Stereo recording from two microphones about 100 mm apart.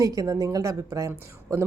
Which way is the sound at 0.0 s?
35° right (ahead or behind).